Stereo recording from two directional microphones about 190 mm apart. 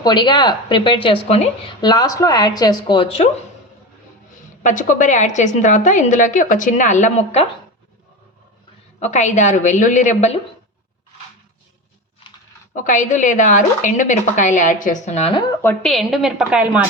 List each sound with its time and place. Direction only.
0.0 s speech: 25° left (ahead or behind)
1.9 s speech: 20° left (ahead or behind)
4.6 s a woman's voice: 45° left (ahead or behind)
9.0 s a woman's voice: 40° left (ahead or behind)
12.7 s a woman's voice: 45° left (ahead or behind)
15.6 s a woman's voice: 5° left (ahead or behind)